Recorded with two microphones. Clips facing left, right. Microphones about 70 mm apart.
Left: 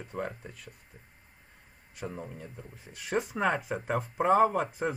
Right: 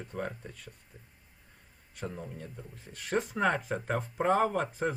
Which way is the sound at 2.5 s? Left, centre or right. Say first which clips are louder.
Even; centre.